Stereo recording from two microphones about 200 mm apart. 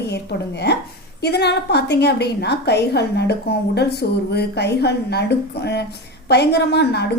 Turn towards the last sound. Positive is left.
turn(degrees=55)  # may be behind; listen again after turning